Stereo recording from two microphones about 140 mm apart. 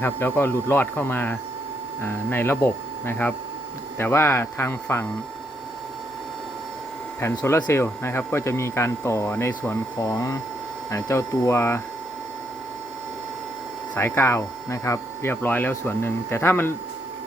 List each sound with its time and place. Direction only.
0.0 s speech: 15° left (ahead or behind)
7.2 s speech: 20° left (ahead or behind)
13.9 s speech: 20° left (ahead or behind)